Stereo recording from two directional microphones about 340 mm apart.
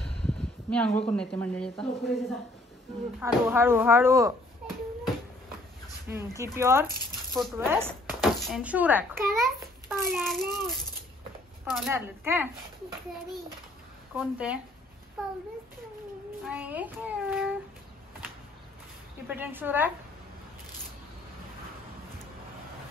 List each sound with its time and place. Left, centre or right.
0.0 s a sound: centre
1.1 s speech: centre
6.0 s speech: centre
14.1 s speech: centre
16.4 s speech: centre
19.2 s speech: centre